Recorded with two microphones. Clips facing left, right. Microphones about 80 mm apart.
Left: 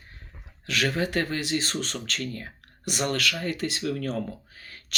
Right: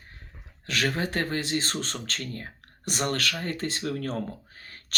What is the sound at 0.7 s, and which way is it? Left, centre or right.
Speech, right.